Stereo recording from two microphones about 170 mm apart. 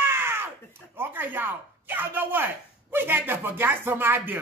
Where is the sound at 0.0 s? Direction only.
15° right (ahead or behind).